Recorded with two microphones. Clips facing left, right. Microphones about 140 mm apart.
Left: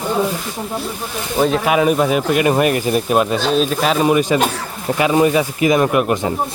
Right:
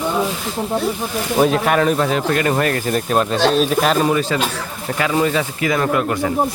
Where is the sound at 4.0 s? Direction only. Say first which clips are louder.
Left 3 dB; 15° left (ahead or behind).